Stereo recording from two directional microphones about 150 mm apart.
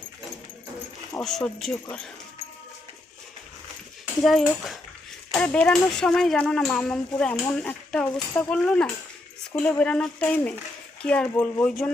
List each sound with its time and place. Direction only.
1.2 s speech: centre (ahead or behind)
4.2 s speech: centre (ahead or behind)